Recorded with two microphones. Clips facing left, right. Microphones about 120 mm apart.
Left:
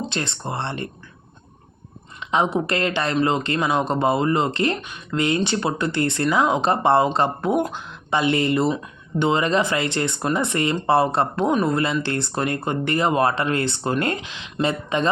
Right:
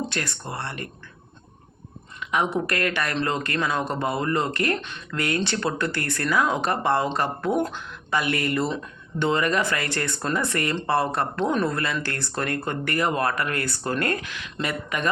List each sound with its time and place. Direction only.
0.0 s speech: 20° left (ahead or behind)
2.2 s speech: 20° left (ahead or behind)